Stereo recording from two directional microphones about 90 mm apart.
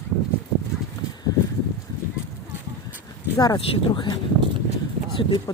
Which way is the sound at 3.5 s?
60° left (ahead or behind).